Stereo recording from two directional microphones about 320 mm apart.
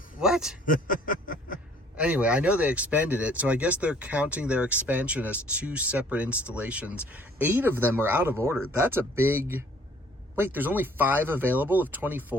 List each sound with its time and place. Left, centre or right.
0.2 s speech: centre
0.6 s a sound: left
2.0 s speech: centre